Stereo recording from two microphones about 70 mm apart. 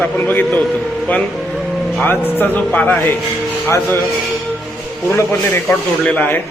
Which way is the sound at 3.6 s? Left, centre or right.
Left.